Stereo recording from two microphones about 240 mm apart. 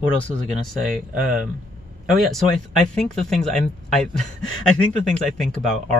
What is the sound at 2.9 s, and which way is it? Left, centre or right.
Speech, centre.